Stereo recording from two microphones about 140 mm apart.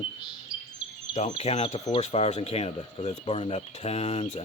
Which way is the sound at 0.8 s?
5° right (ahead or behind).